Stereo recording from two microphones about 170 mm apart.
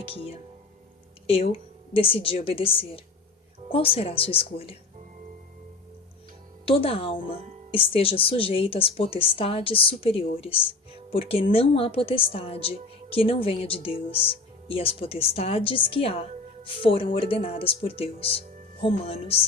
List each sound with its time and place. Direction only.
1.3 s a woman's voice: 35° left (ahead or behind)
6.7 s a woman's voice: 30° left (ahead or behind)